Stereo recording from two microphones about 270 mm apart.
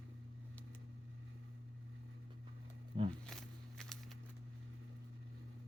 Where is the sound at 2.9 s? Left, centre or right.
Centre.